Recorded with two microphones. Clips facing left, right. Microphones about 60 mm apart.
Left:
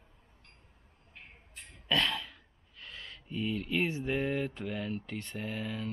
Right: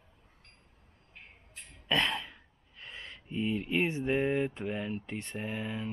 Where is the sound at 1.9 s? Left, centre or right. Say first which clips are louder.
Right 1 dB; right.